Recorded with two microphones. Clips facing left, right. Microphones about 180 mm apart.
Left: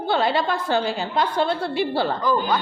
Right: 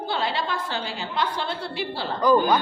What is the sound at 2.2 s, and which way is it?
Speech, 15° right (ahead or behind).